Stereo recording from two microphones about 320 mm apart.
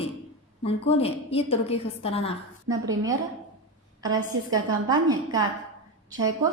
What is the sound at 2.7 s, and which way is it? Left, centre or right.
Speech, centre.